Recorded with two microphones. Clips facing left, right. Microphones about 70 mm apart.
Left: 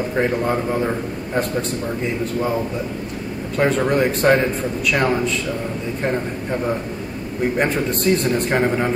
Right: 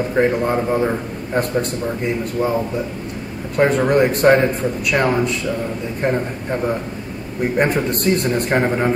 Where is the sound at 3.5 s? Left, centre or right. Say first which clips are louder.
Right 3 dB; centre.